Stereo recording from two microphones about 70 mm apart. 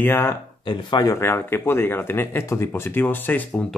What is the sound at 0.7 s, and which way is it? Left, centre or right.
Speech, left.